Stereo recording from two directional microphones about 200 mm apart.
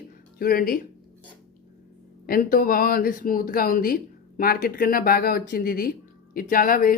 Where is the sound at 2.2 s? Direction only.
45° left (ahead or behind).